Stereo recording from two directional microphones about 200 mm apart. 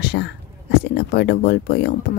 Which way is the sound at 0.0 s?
55° left (ahead or behind).